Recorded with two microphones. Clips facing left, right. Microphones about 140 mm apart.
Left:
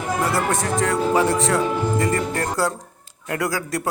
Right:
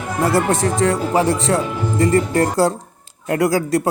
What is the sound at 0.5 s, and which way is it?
A man's voice, 30° right (ahead or behind).